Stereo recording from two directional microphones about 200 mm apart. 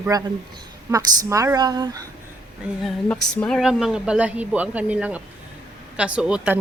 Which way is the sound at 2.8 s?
5° left (ahead or behind).